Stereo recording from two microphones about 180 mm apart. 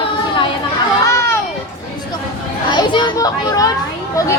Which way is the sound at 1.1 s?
15° left (ahead or behind).